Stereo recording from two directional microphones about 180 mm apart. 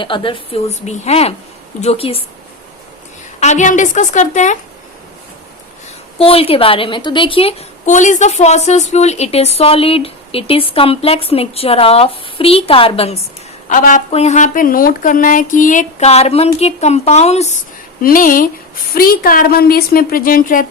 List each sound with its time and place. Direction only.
0.0 s a woman's voice: 30° left (ahead or behind)
3.4 s a woman's voice: 40° left (ahead or behind)
6.1 s a woman's voice: 30° left (ahead or behind)
7.9 s a woman's voice: 45° left (ahead or behind)
13.7 s a woman's voice: 45° left (ahead or behind)
18.0 s a woman's voice: 50° left (ahead or behind)